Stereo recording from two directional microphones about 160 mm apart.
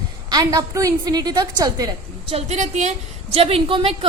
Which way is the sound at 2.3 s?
45° right (ahead or behind).